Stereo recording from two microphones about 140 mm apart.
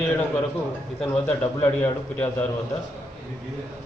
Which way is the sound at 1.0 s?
10° left (ahead or behind).